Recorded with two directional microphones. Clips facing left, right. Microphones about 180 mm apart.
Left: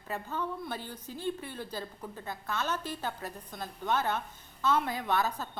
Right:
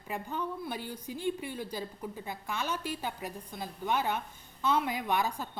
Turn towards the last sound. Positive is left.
turn(degrees=-15)  # may be behind; listen again after turning